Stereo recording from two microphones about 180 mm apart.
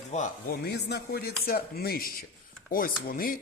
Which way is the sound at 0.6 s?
65° left (ahead or behind).